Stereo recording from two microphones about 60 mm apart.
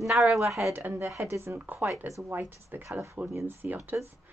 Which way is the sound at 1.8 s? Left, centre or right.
Right.